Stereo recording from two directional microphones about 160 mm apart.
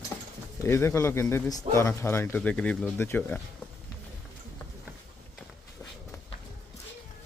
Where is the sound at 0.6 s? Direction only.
15° left (ahead or behind).